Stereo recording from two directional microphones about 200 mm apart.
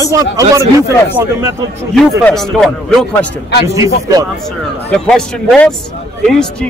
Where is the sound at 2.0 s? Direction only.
Centre (ahead or behind).